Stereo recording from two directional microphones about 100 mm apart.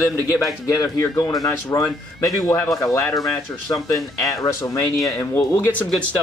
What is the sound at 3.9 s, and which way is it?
A man's voice, 35° left (ahead or behind).